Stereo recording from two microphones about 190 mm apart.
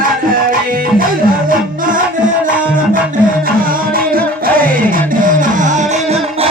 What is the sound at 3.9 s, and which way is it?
Music, 50° right (ahead or behind).